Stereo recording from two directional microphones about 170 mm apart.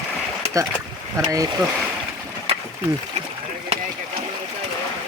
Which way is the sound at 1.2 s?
20° right (ahead or behind).